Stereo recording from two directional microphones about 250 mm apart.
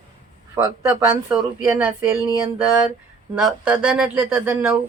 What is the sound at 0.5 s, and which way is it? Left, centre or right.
Speech, centre.